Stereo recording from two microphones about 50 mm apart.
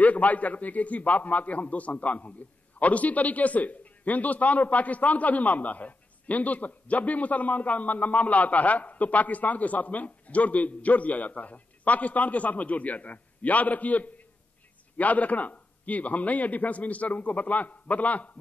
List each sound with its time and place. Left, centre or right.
0.0 s a man's voice: left